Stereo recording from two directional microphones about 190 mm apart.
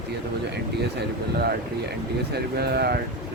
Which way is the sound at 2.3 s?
55° right (ahead or behind).